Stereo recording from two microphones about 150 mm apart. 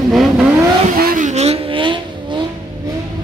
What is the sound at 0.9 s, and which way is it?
Vehicle, 70° right (ahead or behind).